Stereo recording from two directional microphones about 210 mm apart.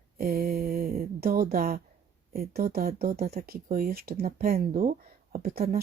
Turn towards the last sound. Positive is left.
turn(degrees=-45)  # may be behind; listen again after turning